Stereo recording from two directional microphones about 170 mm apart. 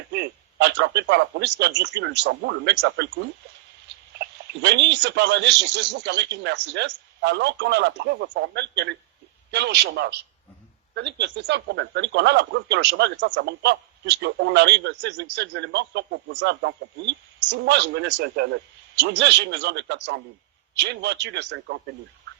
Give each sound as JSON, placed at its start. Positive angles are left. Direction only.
{"t": 0.1, "sound": "a man's voice", "side_deg": -80}